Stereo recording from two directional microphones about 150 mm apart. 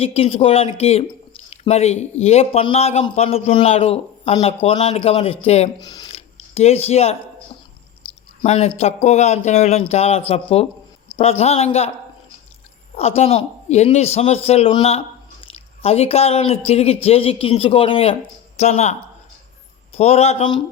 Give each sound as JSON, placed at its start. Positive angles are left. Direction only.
{"t": 0.0, "sound": "speech", "side_deg": 40}
{"t": 5.8, "sound": "speech", "side_deg": 30}
{"t": 6.1, "sound": "a sound", "side_deg": 45}
{"t": 8.4, "sound": "speech", "side_deg": 45}
{"t": 13.0, "sound": "speech", "side_deg": 40}